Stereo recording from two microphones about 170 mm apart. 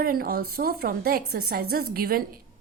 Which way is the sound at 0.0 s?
60° right (ahead or behind).